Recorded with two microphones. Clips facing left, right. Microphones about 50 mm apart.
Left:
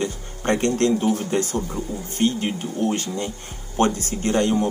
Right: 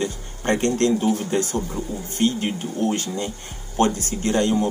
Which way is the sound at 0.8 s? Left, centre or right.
Left.